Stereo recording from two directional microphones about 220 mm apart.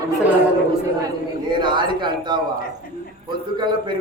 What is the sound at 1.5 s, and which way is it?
A man's voice, 20° right (ahead or behind).